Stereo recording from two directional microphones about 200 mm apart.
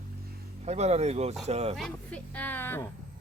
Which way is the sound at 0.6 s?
35° right (ahead or behind).